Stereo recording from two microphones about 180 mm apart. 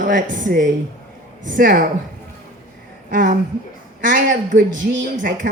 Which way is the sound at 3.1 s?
45° right (ahead or behind).